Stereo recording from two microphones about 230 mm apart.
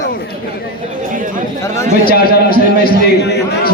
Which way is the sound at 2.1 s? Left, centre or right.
Left.